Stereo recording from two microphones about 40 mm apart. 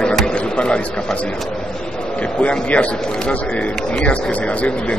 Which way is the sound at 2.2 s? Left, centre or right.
Left.